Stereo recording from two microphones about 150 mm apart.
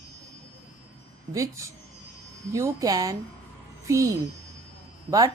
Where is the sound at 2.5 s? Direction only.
20° right (ahead or behind).